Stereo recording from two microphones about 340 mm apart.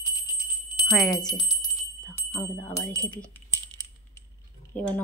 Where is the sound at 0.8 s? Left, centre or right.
Centre.